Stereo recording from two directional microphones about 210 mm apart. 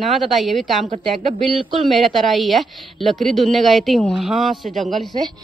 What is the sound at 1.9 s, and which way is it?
A woman's voice, centre (ahead or behind).